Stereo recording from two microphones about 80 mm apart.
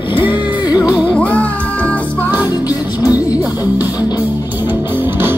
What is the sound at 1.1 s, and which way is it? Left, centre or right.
Music, centre.